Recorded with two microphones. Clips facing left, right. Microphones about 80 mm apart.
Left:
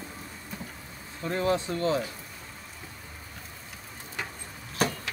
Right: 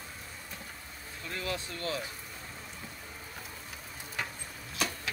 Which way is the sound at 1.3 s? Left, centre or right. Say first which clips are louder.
Left 10 dB; left.